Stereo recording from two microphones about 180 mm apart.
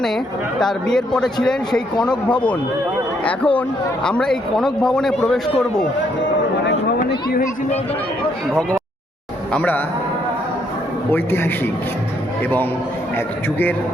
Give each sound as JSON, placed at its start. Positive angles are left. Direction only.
{"t": 0.6, "sound": "speech", "side_deg": 5}
{"t": 3.2, "sound": "a man's voice", "side_deg": 5}
{"t": 7.1, "sound": "speech", "side_deg": 55}
{"t": 9.5, "sound": "a man's voice", "side_deg": 10}
{"t": 11.1, "sound": "a man's voice", "side_deg": 10}
{"t": 13.1, "sound": "a man's voice", "side_deg": 10}